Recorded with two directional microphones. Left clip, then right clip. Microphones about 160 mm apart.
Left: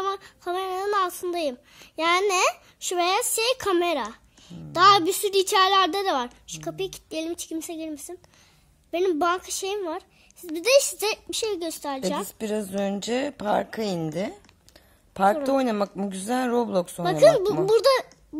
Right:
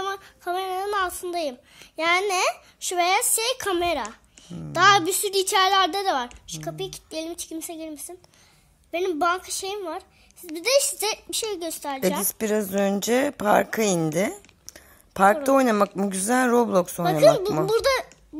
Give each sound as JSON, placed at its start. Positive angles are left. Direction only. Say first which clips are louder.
{"t": 0.0, "sound": "a woman's voice", "louder": "left 1 dB", "side_deg": 40}
{"t": 12.4, "sound": "a woman's voice", "louder": "right 4 dB", "side_deg": 0}
{"t": 13.9, "sound": "a sound", "louder": "right 5 dB", "side_deg": -5}
{"t": 15.4, "sound": "speech", "louder": "right 4 dB", "side_deg": 0}
{"t": 17.2, "sound": "a woman's voice", "louder": "left 1 dB", "side_deg": 40}